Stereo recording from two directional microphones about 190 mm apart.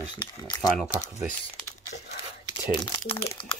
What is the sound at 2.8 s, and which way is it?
Speech, 25° left (ahead or behind).